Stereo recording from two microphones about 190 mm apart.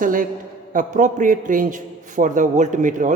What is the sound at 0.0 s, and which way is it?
A man's voice, 45° right (ahead or behind).